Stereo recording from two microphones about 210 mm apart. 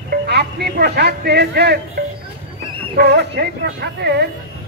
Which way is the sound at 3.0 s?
50° right (ahead or behind).